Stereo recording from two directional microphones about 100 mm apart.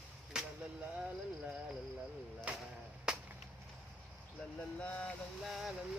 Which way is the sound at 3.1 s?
5° right (ahead or behind).